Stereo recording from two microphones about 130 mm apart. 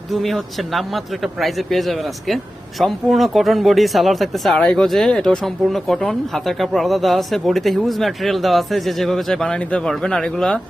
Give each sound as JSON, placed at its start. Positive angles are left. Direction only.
{"t": 0.1, "sound": "speech", "side_deg": 0}